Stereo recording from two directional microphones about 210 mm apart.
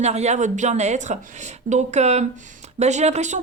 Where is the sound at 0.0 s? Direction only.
30° right (ahead or behind).